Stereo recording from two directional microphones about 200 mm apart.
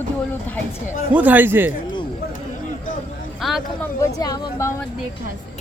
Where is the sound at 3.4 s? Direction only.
Centre (ahead or behind).